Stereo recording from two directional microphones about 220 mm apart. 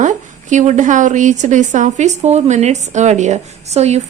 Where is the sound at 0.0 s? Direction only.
35° right (ahead or behind).